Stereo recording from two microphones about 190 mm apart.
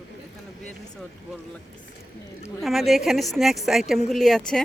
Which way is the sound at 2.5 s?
Centre (ahead or behind).